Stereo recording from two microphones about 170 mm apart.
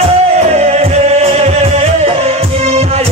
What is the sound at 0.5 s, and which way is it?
Music, 40° right (ahead or behind).